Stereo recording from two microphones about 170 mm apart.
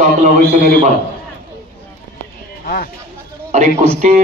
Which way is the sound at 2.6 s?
60° left (ahead or behind).